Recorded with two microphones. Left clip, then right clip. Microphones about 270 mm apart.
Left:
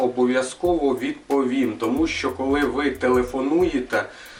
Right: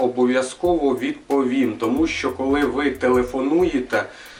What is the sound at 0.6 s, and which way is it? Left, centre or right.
Speech, left.